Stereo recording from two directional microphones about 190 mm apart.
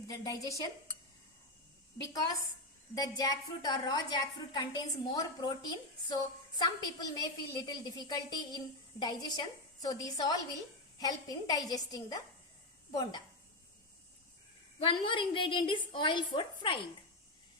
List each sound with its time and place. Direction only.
0.1 s dishes: 15° left (ahead or behind)
2.0 s a woman's voice: 20° left (ahead or behind)
14.8 s a woman's voice: 25° left (ahead or behind)